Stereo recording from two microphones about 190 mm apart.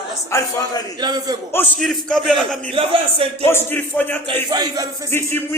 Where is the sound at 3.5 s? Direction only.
10° left (ahead or behind).